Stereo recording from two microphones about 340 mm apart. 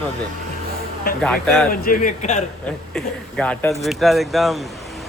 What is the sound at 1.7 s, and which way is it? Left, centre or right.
Speech, left.